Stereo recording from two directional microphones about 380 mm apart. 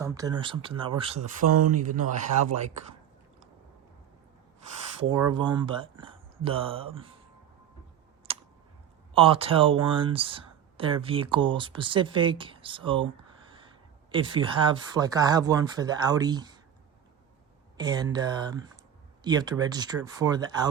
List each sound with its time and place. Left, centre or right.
0.0 s speech: centre
1.5 s speech: right
1.8 s speech: centre
5.0 s speech: centre
8.3 s clicking: centre
9.1 s speech: centre
17.7 s speech: centre